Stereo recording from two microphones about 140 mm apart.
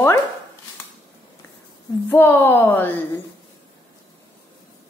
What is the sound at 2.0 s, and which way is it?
Speech, 15° left (ahead or behind).